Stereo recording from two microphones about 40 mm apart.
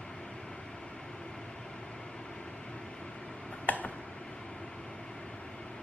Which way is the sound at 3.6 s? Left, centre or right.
Left.